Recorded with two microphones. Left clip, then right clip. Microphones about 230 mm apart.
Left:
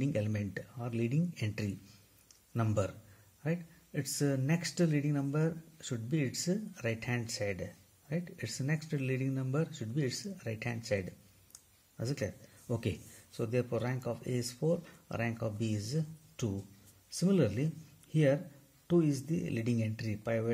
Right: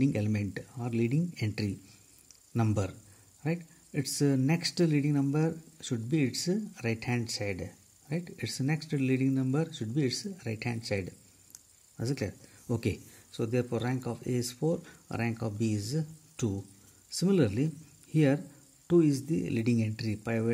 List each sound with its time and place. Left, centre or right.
0.0 s speech: right
12.1 s speech: right